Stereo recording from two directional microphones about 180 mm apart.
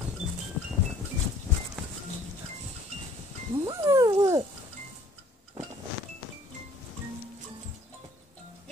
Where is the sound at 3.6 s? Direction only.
20° right (ahead or behind).